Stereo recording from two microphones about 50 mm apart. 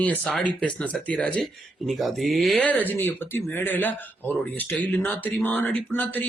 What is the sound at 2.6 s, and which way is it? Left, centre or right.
Speech, left.